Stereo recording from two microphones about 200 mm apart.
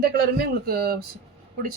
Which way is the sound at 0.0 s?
50° right (ahead or behind).